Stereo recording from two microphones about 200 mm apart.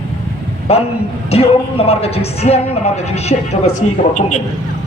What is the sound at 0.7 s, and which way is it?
Speech, 30° left (ahead or behind).